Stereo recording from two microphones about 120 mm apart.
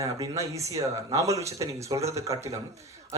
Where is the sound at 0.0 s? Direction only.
25° right (ahead or behind).